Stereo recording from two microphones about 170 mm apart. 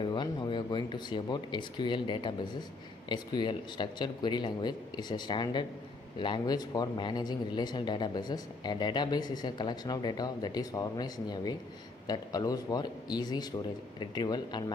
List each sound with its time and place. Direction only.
0.0 s speech: 25° left (ahead or behind)